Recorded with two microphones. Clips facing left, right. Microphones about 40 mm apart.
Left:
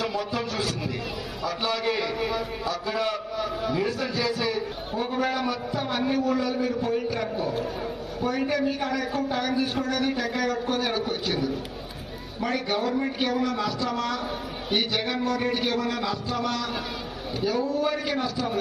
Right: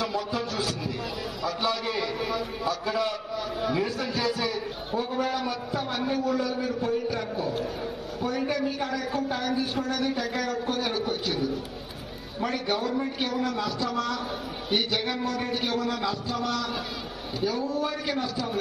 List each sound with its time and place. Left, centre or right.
0.0 s music: left
1.4 s a man's voice: left
12.7 s a woman's voice: left